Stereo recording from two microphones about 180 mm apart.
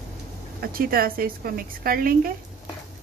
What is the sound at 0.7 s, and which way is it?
Speech, 55° right (ahead or behind).